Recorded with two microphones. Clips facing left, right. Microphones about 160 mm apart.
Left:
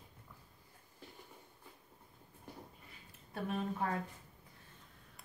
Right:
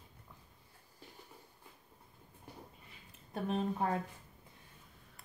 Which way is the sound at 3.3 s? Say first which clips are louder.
Right 3 dB; 25° right (ahead or behind).